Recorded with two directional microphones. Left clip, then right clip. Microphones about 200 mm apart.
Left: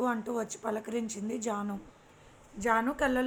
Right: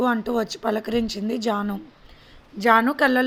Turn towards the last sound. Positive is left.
turn(degrees=-50)  # may be behind; listen again after turning